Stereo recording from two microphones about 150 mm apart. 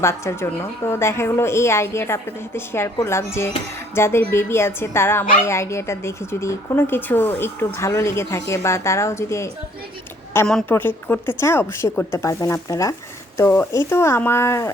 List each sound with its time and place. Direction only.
0.0 s a woman's voice: 20° left (ahead or behind)
10.4 s a woman's voice: 10° left (ahead or behind)